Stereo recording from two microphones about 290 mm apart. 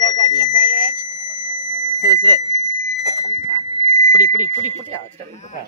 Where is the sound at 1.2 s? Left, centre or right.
Left.